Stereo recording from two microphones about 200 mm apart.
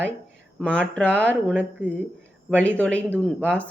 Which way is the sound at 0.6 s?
5° left (ahead or behind).